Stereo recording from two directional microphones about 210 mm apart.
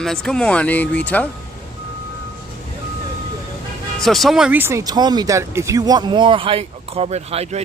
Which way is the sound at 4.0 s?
Centre (ahead or behind).